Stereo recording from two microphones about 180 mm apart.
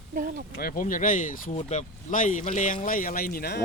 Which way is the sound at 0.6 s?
50° left (ahead or behind).